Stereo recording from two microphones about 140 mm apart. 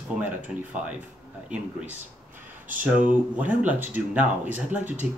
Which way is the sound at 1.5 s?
10° right (ahead or behind).